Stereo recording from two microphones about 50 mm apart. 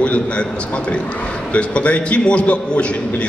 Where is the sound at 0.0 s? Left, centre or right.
Left.